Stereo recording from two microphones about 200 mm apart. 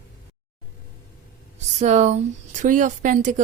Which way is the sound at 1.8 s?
35° right (ahead or behind).